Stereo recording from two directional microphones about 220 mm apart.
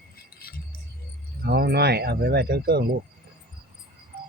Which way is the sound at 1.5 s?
45° right (ahead or behind).